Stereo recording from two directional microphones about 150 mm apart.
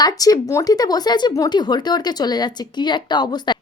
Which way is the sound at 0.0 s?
25° left (ahead or behind).